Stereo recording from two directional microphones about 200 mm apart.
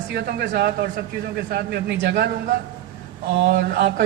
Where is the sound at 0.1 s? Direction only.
55° right (ahead or behind).